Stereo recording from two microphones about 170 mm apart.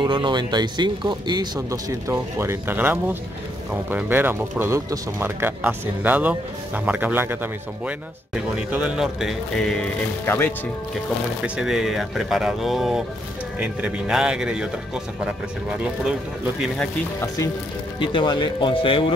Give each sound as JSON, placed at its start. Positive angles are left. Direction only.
{"t": 0.0, "sound": "speech", "side_deg": -30}
{"t": 8.5, "sound": "speech", "side_deg": -5}
{"t": 10.2, "sound": "speech", "side_deg": 15}
{"t": 11.4, "sound": "speech", "side_deg": -5}
{"t": 15.8, "sound": "speech", "side_deg": -5}
{"t": 17.9, "sound": "speech", "side_deg": 30}